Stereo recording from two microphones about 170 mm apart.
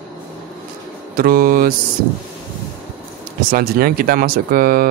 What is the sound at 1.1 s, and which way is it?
Speech, 60° right (ahead or behind).